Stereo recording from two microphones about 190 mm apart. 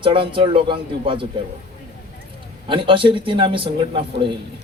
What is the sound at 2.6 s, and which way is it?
A man's voice, 25° right (ahead or behind).